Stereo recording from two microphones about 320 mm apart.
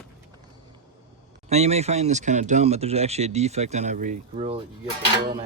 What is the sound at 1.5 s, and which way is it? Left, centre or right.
Speech, centre.